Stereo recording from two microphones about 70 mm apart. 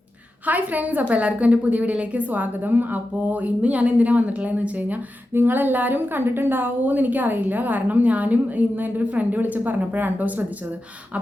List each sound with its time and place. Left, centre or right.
0.4 s a woman's voice: right